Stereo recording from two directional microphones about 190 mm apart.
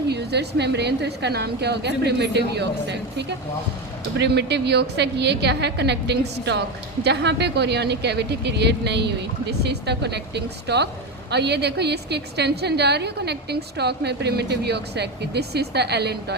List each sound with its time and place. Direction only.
0.1 s a woman's voice: 60° right (ahead or behind)